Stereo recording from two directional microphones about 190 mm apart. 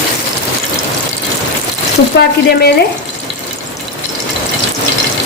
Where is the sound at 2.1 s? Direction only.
65° left (ahead or behind).